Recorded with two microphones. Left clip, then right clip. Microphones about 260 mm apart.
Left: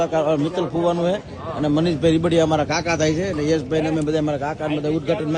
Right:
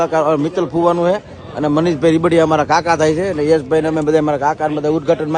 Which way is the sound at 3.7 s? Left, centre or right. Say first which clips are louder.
Right 6 dB; right.